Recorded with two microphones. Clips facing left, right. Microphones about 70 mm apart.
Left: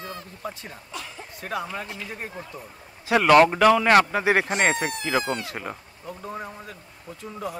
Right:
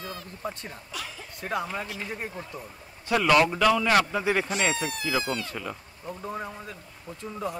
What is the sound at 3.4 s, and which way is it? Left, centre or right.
Speech, left.